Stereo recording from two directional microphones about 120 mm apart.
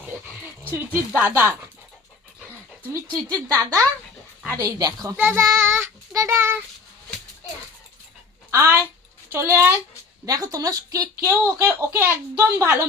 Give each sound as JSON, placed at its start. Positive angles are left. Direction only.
{"t": 0.1, "sound": "a sound", "side_deg": -15}
{"t": 0.7, "sound": "speech", "side_deg": -15}
{"t": 2.9, "sound": "a woman's voice", "side_deg": -30}
{"t": 3.5, "sound": "child singing", "side_deg": -25}
{"t": 4.8, "sound": "a woman's voice", "side_deg": -35}
{"t": 5.1, "sound": "speech", "side_deg": -15}
{"t": 5.5, "sound": "child singing", "side_deg": -20}
{"t": 8.4, "sound": "speech", "side_deg": -20}
{"t": 9.3, "sound": "child singing", "side_deg": -20}
{"t": 10.2, "sound": "a woman's voice", "side_deg": -30}
{"t": 12.4, "sound": "child singing", "side_deg": -20}